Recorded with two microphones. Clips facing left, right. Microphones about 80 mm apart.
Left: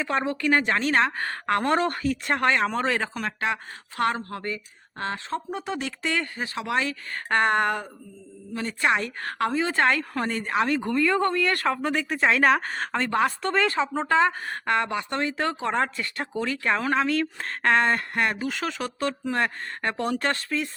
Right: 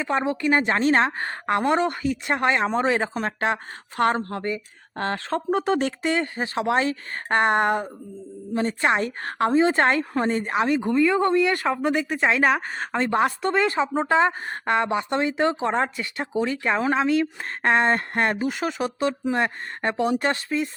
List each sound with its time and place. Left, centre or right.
0.0 s a woman's voice: centre
1.7 s speech: centre
3.2 s speech: right
4.9 s speech: right
6.0 s a woman's voice: right; by 13.0 s centre
13.0 s a woman's voice: centre
18.4 s speech: centre